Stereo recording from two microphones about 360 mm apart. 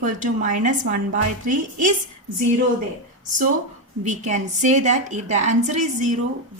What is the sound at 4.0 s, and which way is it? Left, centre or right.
A woman's voice, centre.